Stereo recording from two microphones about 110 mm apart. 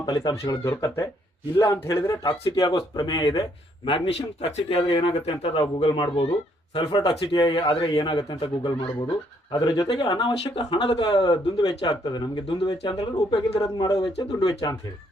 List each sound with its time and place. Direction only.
0.0 s a man's voice: 35° left (ahead or behind)
3.8 s a man's voice: 55° left (ahead or behind)
9.5 s a man's voice: 35° left (ahead or behind)
10.2 s speech: 45° left (ahead or behind)
12.8 s speech: 55° left (ahead or behind)
13.6 s a man's voice: 35° left (ahead or behind)